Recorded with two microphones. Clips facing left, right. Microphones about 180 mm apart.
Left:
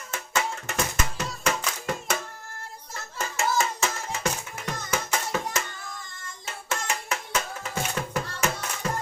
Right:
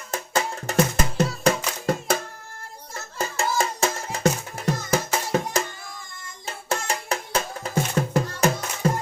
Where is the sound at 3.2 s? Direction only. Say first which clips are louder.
Right 2 dB; 35° right (ahead or behind).